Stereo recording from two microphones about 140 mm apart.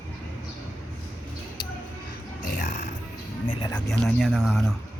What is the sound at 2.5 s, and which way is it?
Music, 65° left (ahead or behind).